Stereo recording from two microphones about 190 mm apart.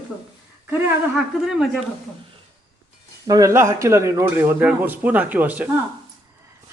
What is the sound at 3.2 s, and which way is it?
A man's voice, 20° right (ahead or behind).